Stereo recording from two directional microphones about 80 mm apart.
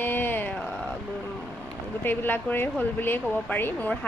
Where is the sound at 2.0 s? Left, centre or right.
Left.